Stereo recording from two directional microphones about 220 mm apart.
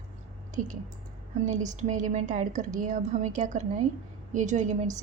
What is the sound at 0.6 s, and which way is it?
A woman's voice, 35° right (ahead or behind).